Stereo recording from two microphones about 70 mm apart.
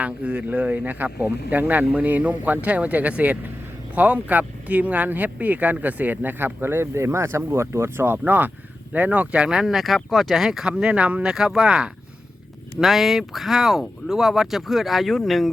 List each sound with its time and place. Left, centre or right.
0.0 s speech: right; by 15.4 s centre